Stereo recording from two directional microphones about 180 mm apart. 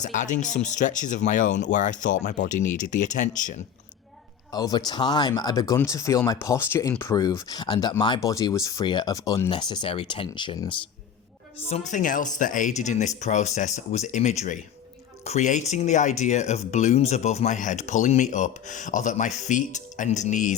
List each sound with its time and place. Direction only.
0.0 s speech: 40° left (ahead or behind)
4.5 s speech: 20° left (ahead or behind)
11.7 s speech: 40° left (ahead or behind)